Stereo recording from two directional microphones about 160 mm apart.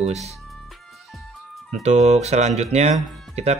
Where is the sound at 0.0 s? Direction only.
45° right (ahead or behind).